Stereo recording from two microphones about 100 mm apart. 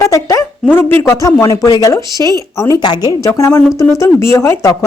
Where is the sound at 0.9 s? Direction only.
30° left (ahead or behind).